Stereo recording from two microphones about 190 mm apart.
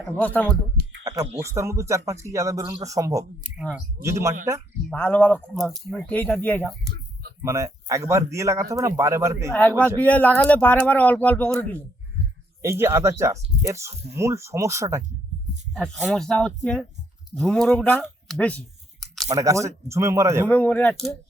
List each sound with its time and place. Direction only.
0.2 s speech: 10° left (ahead or behind)
1.0 s speech: 15° right (ahead or behind)
4.9 s speech: 10° left (ahead or behind)
7.4 s speech: 15° right (ahead or behind)
9.5 s speech: 10° left (ahead or behind)
12.8 s speech: 15° right (ahead or behind)
15.7 s speech: centre (ahead or behind)
19.3 s speech: 15° right (ahead or behind)
20.5 s speech: 5° left (ahead or behind)